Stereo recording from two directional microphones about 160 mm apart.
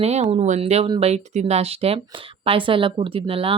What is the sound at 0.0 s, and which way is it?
Speech, 40° right (ahead or behind).